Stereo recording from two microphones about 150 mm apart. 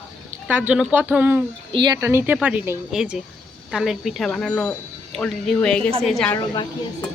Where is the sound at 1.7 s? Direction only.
30° right (ahead or behind).